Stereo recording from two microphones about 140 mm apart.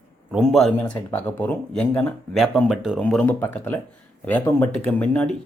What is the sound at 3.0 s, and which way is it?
Speech, 10° left (ahead or behind).